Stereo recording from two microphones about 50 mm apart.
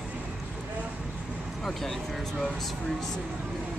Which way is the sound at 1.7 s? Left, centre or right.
Centre.